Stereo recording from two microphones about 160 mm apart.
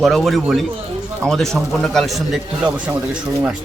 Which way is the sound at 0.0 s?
Centre (ahead or behind).